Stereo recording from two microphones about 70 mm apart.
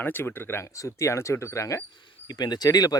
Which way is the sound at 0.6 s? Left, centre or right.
Left.